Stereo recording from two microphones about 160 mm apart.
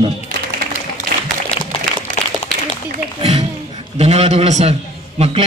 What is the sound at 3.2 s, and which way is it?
Music, 40° right (ahead or behind).